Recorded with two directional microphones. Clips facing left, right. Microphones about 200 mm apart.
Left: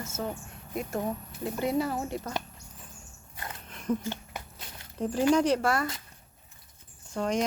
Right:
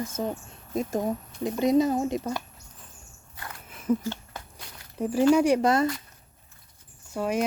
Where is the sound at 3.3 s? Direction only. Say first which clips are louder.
Left 1 dB; 20° left (ahead or behind).